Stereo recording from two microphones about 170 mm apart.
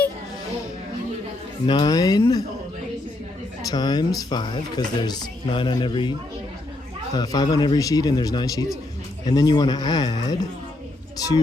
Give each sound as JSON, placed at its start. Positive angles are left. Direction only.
{"t": 1.6, "sound": "speech", "side_deg": 25}
{"t": 3.7, "sound": "speech", "side_deg": 25}